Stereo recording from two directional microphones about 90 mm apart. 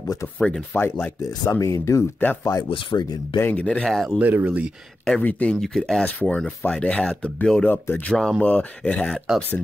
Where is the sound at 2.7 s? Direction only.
65° left (ahead or behind).